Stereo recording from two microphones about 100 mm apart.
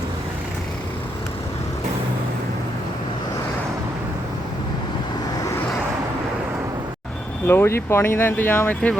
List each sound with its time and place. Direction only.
7.4 s speech: 25° left (ahead or behind)